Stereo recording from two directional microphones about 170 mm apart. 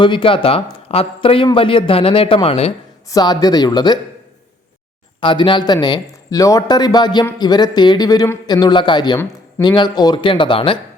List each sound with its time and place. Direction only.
0.0 s speech: 30° left (ahead or behind)
3.1 s speech: 25° left (ahead or behind)
5.2 s speech: 30° left (ahead or behind)